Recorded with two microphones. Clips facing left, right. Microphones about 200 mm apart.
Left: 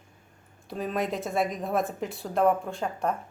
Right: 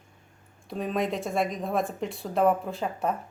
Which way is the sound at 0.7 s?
Centre (ahead or behind).